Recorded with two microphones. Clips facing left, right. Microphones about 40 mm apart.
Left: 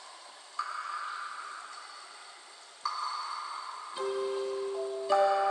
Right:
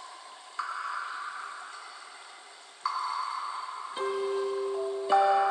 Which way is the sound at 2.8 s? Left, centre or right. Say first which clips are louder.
Right 3 dB; right.